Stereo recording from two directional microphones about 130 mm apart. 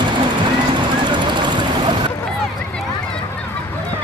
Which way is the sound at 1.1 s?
35° right (ahead or behind).